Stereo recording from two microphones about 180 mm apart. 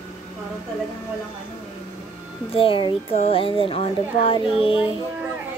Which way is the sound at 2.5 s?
30° left (ahead or behind).